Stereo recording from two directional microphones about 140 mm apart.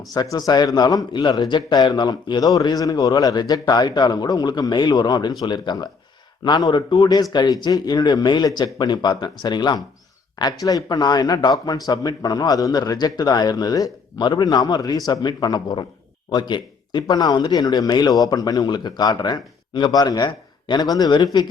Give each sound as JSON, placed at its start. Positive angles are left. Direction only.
{"t": 0.1, "sound": "a man's voice", "side_deg": 25}